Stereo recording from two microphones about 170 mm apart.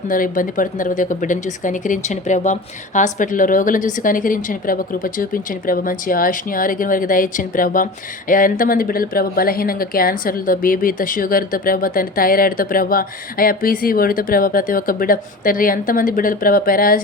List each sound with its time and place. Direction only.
0.1 s a woman's voice: 55° left (ahead or behind)